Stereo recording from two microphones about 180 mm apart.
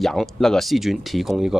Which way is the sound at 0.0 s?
Centre (ahead or behind).